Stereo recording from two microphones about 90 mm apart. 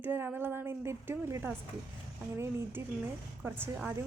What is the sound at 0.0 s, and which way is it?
A woman's voice, 20° right (ahead or behind).